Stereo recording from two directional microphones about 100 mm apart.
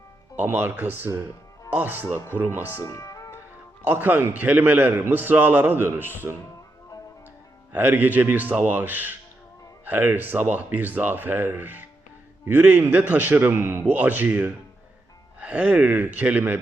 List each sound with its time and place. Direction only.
0.3 s a man's voice: 20° right (ahead or behind)
2.1 s speech: 25° left (ahead or behind)
2.4 s a man's voice: 20° right (ahead or behind)
2.7 s music: 30° left (ahead or behind)
3.8 s a man's voice: 20° right (ahead or behind)
7.7 s a man's voice: 15° right (ahead or behind)